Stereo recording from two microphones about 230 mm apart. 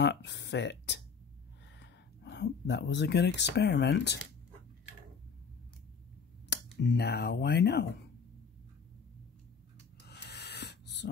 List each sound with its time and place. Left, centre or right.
0.0 s speech: left
6.5 s speech: left
10.0 s a sound: left